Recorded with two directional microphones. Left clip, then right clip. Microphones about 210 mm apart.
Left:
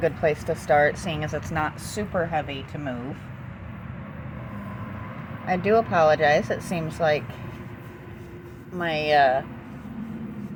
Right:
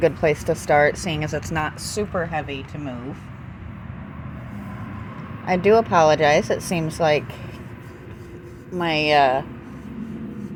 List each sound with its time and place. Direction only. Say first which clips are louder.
0.0 s speech: right 4 dB; 35° right (ahead or behind)
2.3 s speech: even; 15° right (ahead or behind)
5.5 s speech: right 5 dB; 35° right (ahead or behind)
8.8 s speech: right 3 dB; 35° right (ahead or behind)